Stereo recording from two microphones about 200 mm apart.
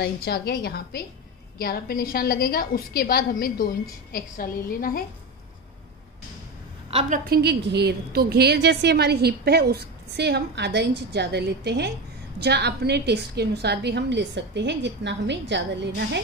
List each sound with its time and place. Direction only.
0.0 s a woman's voice: 50° left (ahead or behind)
6.9 s a woman's voice: 30° right (ahead or behind)
7.2 s a woman's voice: 55° right (ahead or behind)